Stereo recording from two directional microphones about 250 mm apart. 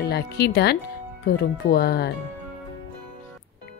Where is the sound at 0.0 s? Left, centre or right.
Left.